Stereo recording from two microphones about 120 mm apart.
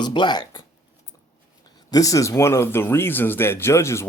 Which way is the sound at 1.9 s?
30° left (ahead or behind).